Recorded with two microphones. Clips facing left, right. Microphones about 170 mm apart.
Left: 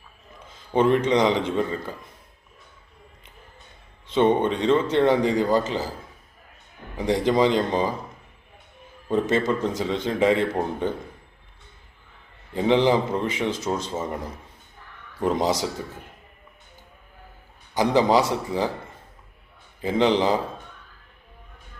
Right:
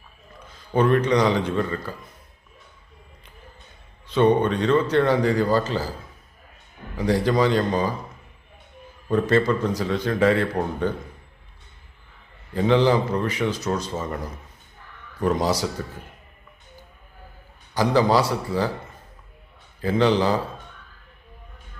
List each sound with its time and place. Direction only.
0.4 s a sound: 25° left (ahead or behind)
1.0 s a man's voice: 20° left (ahead or behind)
4.0 s a man's voice: 20° left (ahead or behind)
6.9 s a man's voice: 20° left (ahead or behind)
9.0 s a man's voice: 20° left (ahead or behind)
12.5 s a man's voice: 20° left (ahead or behind)
15.2 s a man's voice: 25° left (ahead or behind)
17.7 s a man's voice: 20° left (ahead or behind)
19.8 s a man's voice: 20° left (ahead or behind)